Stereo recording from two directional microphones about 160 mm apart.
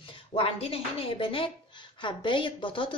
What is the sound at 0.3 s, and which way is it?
A woman's voice, 35° left (ahead or behind).